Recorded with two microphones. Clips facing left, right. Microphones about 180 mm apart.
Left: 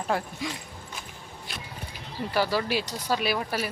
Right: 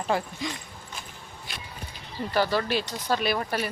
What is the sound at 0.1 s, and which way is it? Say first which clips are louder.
Speech: right 1 dB; 5° left (ahead or behind).